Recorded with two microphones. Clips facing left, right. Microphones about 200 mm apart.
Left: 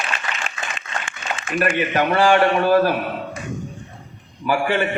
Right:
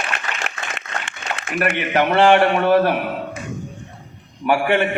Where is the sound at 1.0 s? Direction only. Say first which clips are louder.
Even; 65° right (ahead or behind).